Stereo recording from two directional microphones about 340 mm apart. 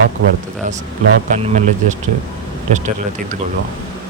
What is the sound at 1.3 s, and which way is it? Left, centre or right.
Speech, right.